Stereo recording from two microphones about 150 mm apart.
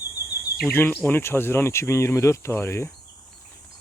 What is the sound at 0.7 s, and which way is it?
Speech, 15° left (ahead or behind).